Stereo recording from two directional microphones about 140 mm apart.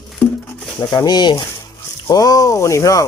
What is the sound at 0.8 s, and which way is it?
Speech, 25° left (ahead or behind).